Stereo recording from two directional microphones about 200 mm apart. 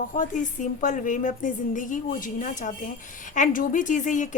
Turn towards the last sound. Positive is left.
turn(degrees=40)  # may be behind; listen again after turning